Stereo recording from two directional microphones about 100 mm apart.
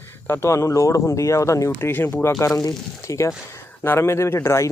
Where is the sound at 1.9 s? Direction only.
20° left (ahead or behind).